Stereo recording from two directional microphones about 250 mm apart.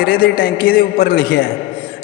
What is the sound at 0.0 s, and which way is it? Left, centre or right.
A man's voice, left.